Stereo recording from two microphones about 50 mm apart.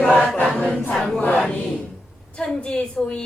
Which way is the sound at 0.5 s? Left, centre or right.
Left.